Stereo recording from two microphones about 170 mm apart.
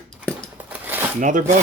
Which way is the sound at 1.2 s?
50° right (ahead or behind).